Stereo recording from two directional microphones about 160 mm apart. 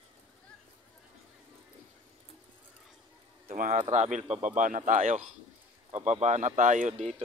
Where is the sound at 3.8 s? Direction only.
45° right (ahead or behind).